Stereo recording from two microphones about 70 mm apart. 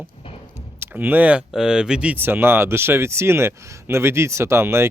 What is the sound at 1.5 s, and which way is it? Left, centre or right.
Speech, centre.